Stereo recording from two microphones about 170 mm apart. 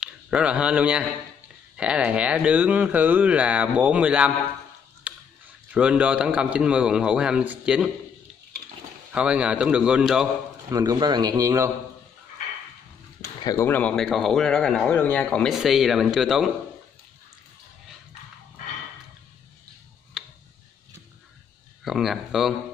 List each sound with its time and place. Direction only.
0.0 s speech: 5° right (ahead or behind)
5.1 s a sound: 10° right (ahead or behind)
5.7 s speech: 5° right (ahead or behind)
9.1 s speech: 5° right (ahead or behind)
10.7 s a man's voice: 20° right (ahead or behind)
13.2 s a sound: 20° left (ahead or behind)
13.7 s speech: 10° left (ahead or behind)
21.8 s speech: centre (ahead or behind)